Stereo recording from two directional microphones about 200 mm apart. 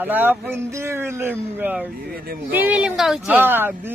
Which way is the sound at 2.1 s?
45° right (ahead or behind).